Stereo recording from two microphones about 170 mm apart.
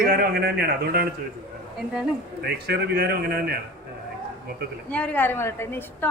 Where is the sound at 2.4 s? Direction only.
70° right (ahead or behind).